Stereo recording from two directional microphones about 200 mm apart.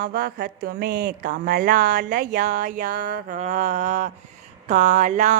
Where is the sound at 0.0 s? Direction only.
50° right (ahead or behind).